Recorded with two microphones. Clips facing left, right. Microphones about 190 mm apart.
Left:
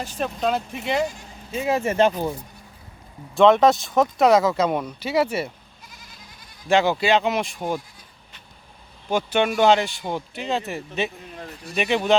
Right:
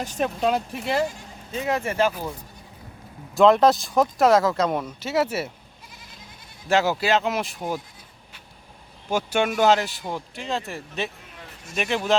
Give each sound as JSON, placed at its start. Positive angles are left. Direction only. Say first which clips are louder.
{"t": 0.2, "sound": "speech", "louder": "right 1 dB", "side_deg": -10}
{"t": 1.5, "sound": "speech", "louder": "left 3 dB", "side_deg": 15}
{"t": 1.9, "sound": "speech", "louder": "left 6 dB", "side_deg": 25}
{"t": 3.3, "sound": "speech", "louder": "left 1 dB", "side_deg": 0}
{"t": 6.7, "sound": "speech", "louder": "left 2 dB", "side_deg": -5}
{"t": 9.0, "sound": "speech", "louder": "left 2 dB", "side_deg": -10}
{"t": 11.3, "sound": "a sound", "louder": "left 6 dB", "side_deg": 35}